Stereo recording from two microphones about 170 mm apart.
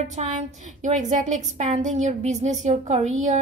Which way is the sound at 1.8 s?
45° right (ahead or behind).